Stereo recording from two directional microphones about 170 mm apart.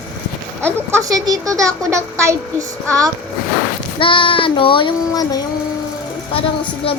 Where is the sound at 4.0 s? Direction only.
30° left (ahead or behind).